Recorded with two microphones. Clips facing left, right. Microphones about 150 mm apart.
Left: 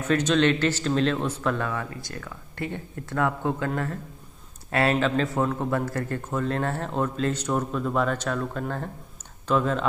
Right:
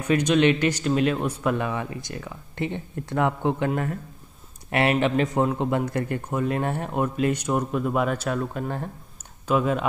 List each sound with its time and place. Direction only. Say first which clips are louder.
0.0 s a man's voice: right 2 dB; 15° right (ahead or behind)